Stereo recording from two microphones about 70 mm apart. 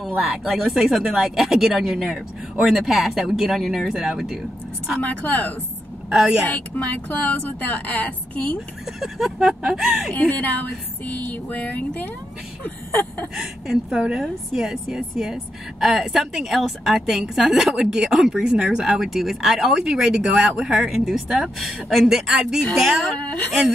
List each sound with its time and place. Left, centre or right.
0.3 s speech: centre
5.0 s speech: left
6.1 s a woman's voice: centre
6.4 s speech: left
9.0 s speech: centre
10.1 s speech: left
13.3 s a woman's voice: centre
23.1 s speech: left